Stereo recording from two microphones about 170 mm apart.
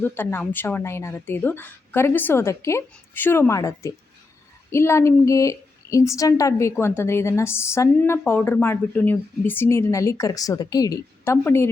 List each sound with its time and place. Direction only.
0.0 s a woman's voice: 10° left (ahead or behind)